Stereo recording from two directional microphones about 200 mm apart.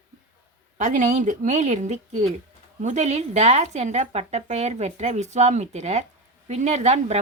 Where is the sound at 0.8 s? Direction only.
40° right (ahead or behind).